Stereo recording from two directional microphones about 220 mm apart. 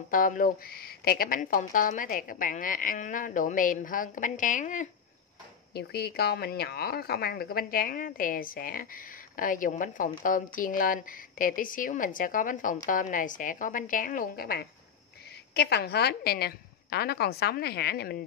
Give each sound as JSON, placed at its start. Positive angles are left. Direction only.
{"t": 0.1, "sound": "a woman's voice", "side_deg": 35}
{"t": 5.7, "sound": "a woman's voice", "side_deg": 45}